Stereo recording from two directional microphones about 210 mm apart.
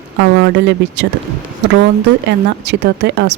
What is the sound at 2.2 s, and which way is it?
Speech, 55° right (ahead or behind).